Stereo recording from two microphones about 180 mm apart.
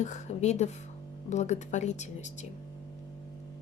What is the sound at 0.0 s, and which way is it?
Speech, 40° left (ahead or behind).